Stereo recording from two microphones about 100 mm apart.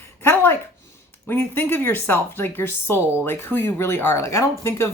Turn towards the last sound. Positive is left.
turn(degrees=30)  # may be behind; listen again after turning